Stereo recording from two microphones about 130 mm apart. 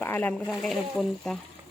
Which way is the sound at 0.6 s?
5° left (ahead or behind).